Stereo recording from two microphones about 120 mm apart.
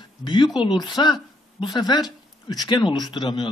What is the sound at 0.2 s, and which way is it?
A woman's voice, 40° left (ahead or behind).